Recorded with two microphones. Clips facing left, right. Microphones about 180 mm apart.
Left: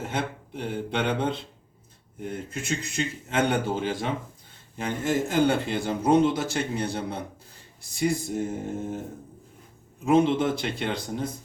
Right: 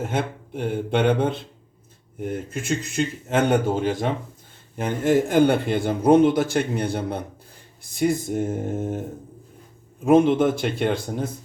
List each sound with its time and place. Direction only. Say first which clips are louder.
0.0 s speech: right 4 dB; 50° right (ahead or behind)
4.8 s a man's voice: right 6 dB; 55° right (ahead or behind)
10.1 s speech: right 5 dB; 50° right (ahead or behind)